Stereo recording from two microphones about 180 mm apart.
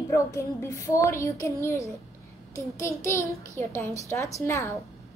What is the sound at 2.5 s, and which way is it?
Child singing, 15° left (ahead or behind).